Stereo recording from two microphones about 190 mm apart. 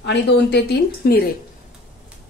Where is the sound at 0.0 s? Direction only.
65° left (ahead or behind).